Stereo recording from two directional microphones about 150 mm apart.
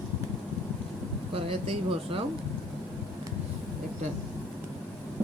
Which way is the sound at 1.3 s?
40° right (ahead or behind).